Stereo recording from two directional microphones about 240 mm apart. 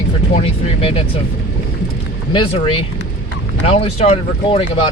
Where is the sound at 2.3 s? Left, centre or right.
Left.